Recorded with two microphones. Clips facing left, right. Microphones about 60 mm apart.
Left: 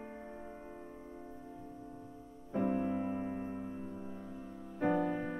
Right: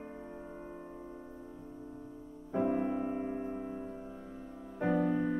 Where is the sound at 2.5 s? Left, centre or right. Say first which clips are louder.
Right 2 dB; centre.